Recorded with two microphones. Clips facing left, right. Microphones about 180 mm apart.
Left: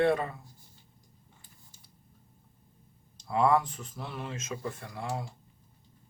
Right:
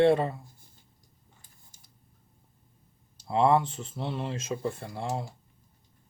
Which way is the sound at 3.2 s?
25° right (ahead or behind).